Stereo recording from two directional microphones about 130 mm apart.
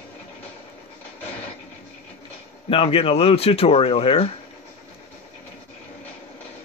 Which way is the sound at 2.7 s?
50° left (ahead or behind).